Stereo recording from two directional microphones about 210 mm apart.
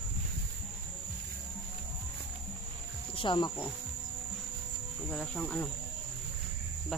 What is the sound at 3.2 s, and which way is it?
Speech, 20° left (ahead or behind).